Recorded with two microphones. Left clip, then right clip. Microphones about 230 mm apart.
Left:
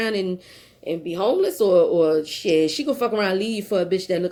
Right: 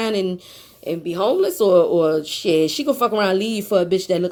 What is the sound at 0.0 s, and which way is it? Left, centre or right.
Speech, right.